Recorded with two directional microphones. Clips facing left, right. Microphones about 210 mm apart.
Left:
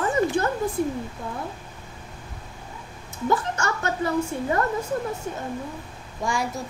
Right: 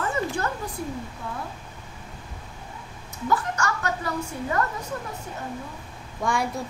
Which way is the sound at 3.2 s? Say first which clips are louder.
Left 1 dB; 20° left (ahead or behind).